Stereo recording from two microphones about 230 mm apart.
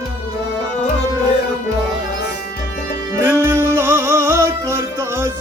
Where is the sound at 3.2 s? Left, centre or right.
Centre.